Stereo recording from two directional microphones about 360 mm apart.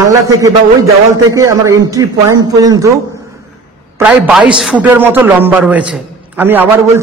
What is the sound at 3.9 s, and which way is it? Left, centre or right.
A man's voice, centre.